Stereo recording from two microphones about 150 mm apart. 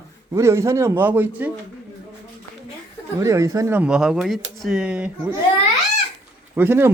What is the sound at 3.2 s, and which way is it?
Speech, 20° right (ahead or behind).